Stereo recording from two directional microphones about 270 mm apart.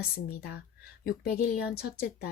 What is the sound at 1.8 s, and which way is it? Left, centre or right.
Speech, left.